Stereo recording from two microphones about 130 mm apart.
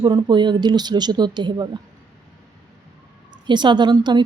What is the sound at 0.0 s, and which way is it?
A woman's voice, 35° right (ahead or behind).